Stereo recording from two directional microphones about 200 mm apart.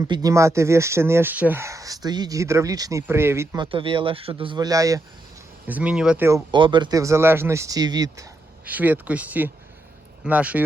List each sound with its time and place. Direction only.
0.0 s speech: 15° right (ahead or behind)
3.7 s speech: 25° right (ahead or behind); by 10.6 s 5° right (ahead or behind)